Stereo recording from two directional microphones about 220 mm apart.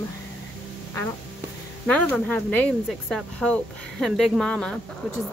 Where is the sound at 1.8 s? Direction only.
5° left (ahead or behind).